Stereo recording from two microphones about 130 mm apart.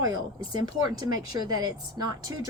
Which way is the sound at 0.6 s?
30° right (ahead or behind).